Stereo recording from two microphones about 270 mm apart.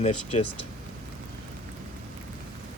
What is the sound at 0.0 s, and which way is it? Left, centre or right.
Speech, left.